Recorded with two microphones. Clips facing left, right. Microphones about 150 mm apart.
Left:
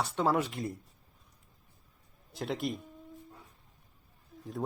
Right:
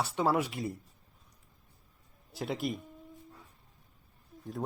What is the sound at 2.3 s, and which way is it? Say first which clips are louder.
Speech: even; 5° right (ahead or behind).